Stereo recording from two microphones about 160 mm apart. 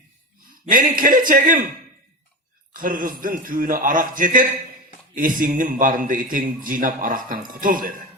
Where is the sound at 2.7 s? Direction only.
60° right (ahead or behind).